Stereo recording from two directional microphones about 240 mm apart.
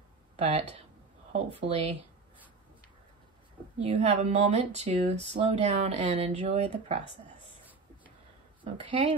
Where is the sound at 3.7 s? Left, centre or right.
Right.